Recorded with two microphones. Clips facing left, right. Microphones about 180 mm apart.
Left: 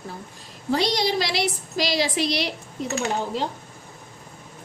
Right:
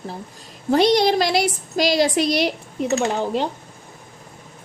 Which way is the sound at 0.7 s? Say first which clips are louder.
Right 7 dB; 55° right (ahead or behind).